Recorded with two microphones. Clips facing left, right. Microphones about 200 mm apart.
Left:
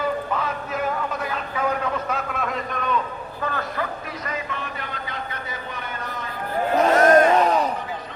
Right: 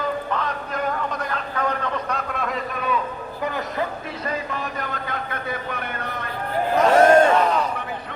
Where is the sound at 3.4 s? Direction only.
15° right (ahead or behind).